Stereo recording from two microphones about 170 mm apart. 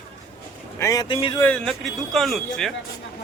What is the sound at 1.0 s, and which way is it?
Speech, 30° left (ahead or behind).